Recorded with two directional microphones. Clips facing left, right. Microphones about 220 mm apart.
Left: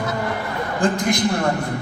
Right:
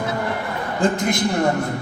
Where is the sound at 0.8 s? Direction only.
25° right (ahead or behind).